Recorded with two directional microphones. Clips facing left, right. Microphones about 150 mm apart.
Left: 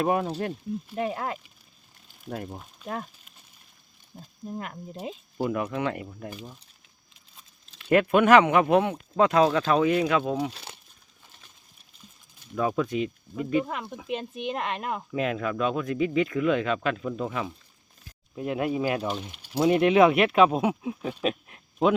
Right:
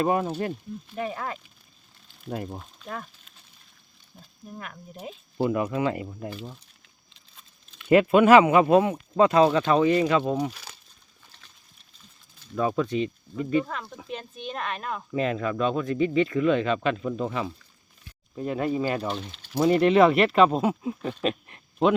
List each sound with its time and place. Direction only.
0.0 s speech: 5° left (ahead or behind)
0.9 s speech: 20° left (ahead or behind)
2.2 s speech: 5° right (ahead or behind)
4.2 s speech: 25° left (ahead or behind)
5.5 s speech: 5° right (ahead or behind)
7.9 s speech: 5° right (ahead or behind)
10.5 s speech: 25° left (ahead or behind)
12.5 s speech: centre (ahead or behind); by 15.0 s 20° left (ahead or behind)
15.1 s speech: centre (ahead or behind)